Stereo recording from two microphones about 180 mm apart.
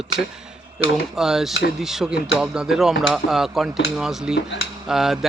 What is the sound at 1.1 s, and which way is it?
Speech, centre (ahead or behind).